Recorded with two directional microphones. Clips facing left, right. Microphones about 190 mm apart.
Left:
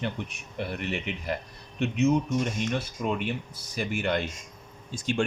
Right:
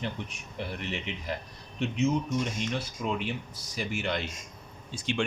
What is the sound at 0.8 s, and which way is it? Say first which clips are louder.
Speech: left 3 dB; 60° left (ahead or behind).